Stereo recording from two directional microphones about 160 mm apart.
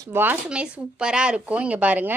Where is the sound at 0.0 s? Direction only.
15° right (ahead or behind).